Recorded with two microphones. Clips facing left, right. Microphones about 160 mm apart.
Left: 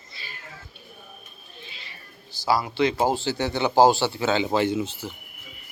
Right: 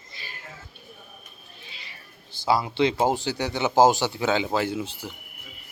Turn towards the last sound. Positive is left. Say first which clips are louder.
# left 4 dB
turn(degrees=-10)  # may be behind; listen again after turning